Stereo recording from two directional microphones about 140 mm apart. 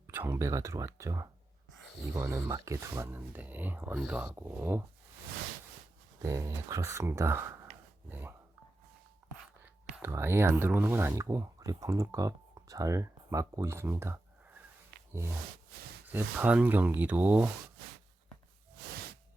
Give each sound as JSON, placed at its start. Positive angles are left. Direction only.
{"t": 0.1, "sound": "speech", "side_deg": -15}
{"t": 6.2, "sound": "speech", "side_deg": -20}
{"t": 9.6, "sound": "speech", "side_deg": -15}
{"t": 14.9, "sound": "a sound", "side_deg": -90}
{"t": 16.1, "sound": "speech", "side_deg": -10}